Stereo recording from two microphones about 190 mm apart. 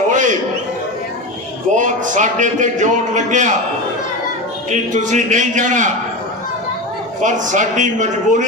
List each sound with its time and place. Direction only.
0.1 s a sound: 40° right (ahead or behind)
1.7 s a man's voice: 40° right (ahead or behind)
4.7 s a man's voice: 40° right (ahead or behind)
7.2 s a man's voice: 40° right (ahead or behind)